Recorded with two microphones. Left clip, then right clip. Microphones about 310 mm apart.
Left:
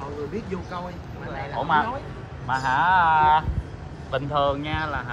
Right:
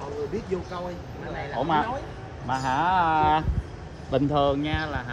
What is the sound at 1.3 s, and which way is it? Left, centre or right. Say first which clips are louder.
Speech: left 2 dB; right.